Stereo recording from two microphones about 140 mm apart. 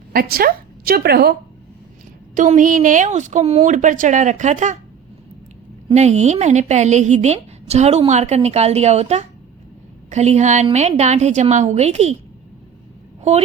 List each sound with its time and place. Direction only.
0.1 s a woman's voice: 90° right
2.3 s a woman's voice: 65° right (ahead or behind)
5.9 s a woman's voice: 55° right (ahead or behind)